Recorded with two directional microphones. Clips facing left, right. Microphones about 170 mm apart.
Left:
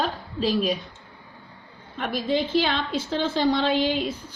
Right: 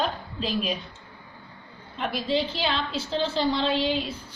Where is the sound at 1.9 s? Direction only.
50° left (ahead or behind).